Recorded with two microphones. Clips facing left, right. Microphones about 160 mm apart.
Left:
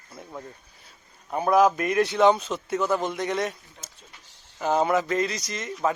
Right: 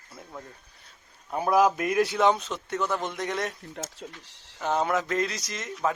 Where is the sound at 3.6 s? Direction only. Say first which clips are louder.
Right 12 dB; 90° right.